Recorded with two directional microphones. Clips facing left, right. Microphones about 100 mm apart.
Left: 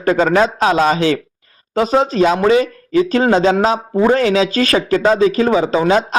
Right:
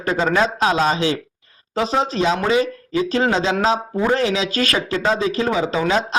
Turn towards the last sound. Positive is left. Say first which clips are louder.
# left 5 dB
turn(degrees=40)  # may be behind; listen again after turning